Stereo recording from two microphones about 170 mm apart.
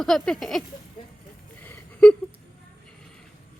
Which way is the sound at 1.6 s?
10° left (ahead or behind).